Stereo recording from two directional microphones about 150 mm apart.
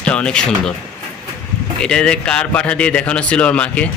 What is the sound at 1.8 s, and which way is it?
A man's voice, 5° left (ahead or behind).